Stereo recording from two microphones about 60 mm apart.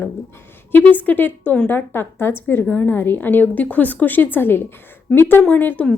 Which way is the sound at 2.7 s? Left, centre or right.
Left.